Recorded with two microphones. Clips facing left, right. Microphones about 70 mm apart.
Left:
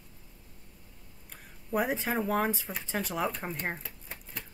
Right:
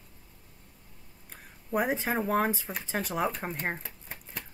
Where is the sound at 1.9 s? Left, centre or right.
Centre.